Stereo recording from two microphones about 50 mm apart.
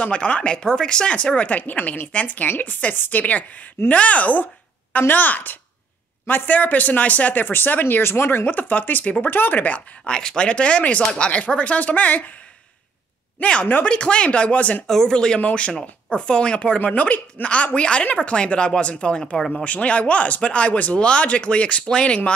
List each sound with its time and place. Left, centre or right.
0.0 s speech: left
8.5 s speech: left
10.0 s speech: centre; by 12.2 s left
13.4 s speech: left
14.9 s speech: centre